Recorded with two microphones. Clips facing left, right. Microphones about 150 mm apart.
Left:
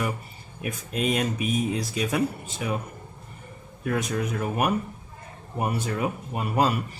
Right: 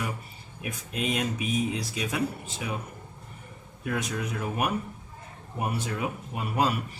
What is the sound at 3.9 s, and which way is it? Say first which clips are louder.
Speech: left 4 dB; 45° left (ahead or behind).